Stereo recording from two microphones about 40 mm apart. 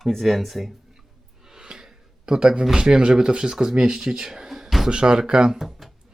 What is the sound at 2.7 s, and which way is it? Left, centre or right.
Speech, right.